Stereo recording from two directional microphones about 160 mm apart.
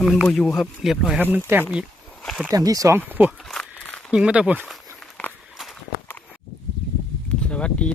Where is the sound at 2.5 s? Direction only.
20° right (ahead or behind).